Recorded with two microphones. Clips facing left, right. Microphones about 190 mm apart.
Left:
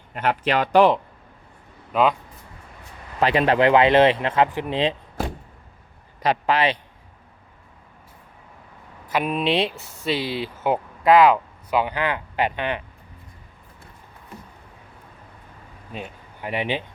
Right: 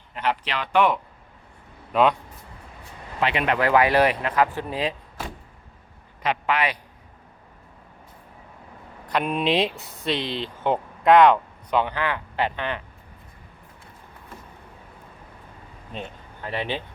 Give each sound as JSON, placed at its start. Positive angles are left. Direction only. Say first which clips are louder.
{"t": 0.1, "sound": "speech", "louder": "left 5 dB", "side_deg": 50}
{"t": 1.9, "sound": "speech", "louder": "even", "side_deg": 0}
{"t": 3.2, "sound": "a man's voice", "louder": "left 5 dB", "side_deg": 40}
{"t": 6.2, "sound": "a man's voice", "louder": "left 4 dB", "side_deg": 35}
{"t": 9.0, "sound": "speech", "louder": "left 1 dB", "side_deg": 5}
{"t": 15.9, "sound": "speech", "louder": "left 1 dB", "side_deg": 5}